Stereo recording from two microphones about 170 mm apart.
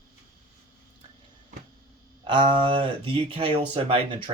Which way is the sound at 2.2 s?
30° right (ahead or behind).